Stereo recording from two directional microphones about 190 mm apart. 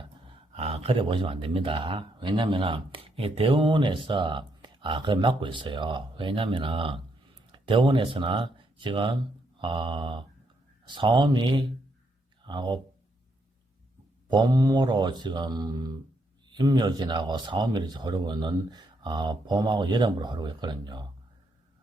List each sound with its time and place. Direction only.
0.5 s speech: 30° right (ahead or behind)
14.3 s speech: 20° right (ahead or behind)